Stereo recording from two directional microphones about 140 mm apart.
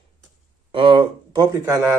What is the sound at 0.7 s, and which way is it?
Speech, 40° right (ahead or behind).